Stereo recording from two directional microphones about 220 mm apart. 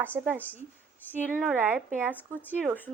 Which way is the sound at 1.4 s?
5° right (ahead or behind).